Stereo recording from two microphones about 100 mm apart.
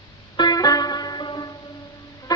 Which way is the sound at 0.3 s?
40° left (ahead or behind).